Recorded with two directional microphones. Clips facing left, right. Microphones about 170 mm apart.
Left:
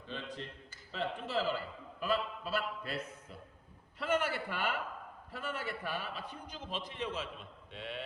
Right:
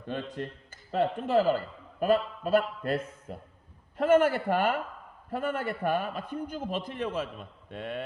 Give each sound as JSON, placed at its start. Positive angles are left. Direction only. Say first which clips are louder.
{"t": 0.0, "sound": "a man's voice", "louder": "right 8 dB", "side_deg": -55}